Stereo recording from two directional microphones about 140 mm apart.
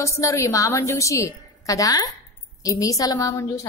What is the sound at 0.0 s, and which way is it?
Speech, 20° left (ahead or behind).